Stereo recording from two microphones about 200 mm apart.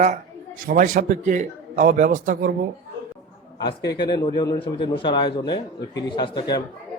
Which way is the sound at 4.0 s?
20° left (ahead or behind).